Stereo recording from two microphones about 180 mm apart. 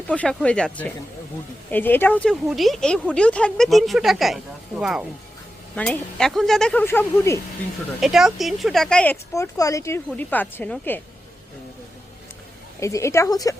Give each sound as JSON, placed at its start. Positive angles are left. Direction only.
{"t": 0.1, "sound": "speech", "side_deg": 5}
{"t": 8.0, "sound": "speech", "side_deg": 0}
{"t": 9.3, "sound": "speech", "side_deg": 15}
{"t": 12.8, "sound": "speech", "side_deg": 15}